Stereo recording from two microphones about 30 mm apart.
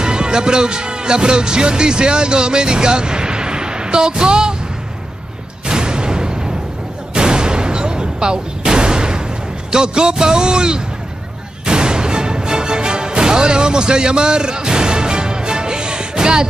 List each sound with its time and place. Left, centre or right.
0.0 s speech: right
5.7 s music: right
7.2 s artillery fire: right
9.7 s a man's voice: right
11.6 s music: right